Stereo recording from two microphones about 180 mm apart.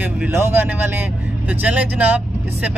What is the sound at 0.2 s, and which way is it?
Speech, 10° right (ahead or behind).